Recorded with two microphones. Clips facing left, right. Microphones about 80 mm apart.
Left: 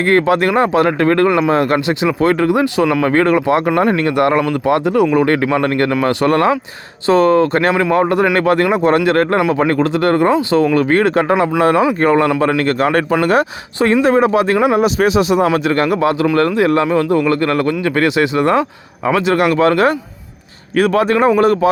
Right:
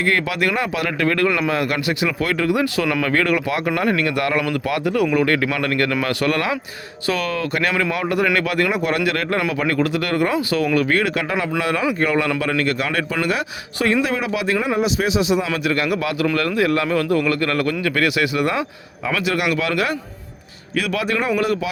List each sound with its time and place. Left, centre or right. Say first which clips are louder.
0.0 s speech: left 7 dB; left